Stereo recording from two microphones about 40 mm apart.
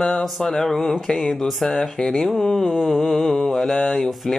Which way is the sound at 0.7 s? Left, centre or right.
Centre.